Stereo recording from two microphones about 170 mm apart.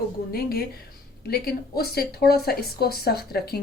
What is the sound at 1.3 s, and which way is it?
Speech, 65° left (ahead or behind).